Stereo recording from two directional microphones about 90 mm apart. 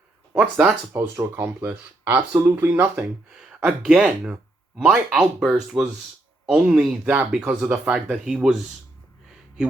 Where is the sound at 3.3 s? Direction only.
5° right (ahead or behind).